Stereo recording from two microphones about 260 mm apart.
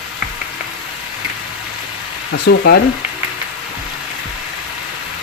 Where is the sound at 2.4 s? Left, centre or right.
Left.